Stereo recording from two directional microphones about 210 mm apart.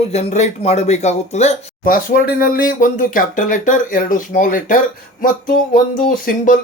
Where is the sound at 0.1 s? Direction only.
30° left (ahead or behind).